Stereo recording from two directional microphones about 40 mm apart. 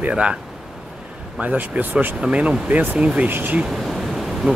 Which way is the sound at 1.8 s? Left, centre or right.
Right.